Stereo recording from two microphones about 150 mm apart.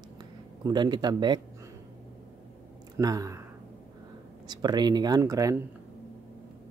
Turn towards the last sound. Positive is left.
turn(degrees=-20)  # may be behind; listen again after turning